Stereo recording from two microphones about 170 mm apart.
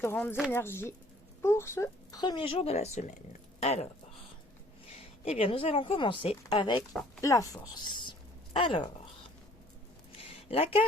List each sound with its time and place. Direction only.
0.0 s a woman's voice: 15° left (ahead or behind); by 3.8 s 40° left (ahead or behind)
5.2 s a woman's voice: 35° left (ahead or behind)
10.2 s a sound: 35° left (ahead or behind)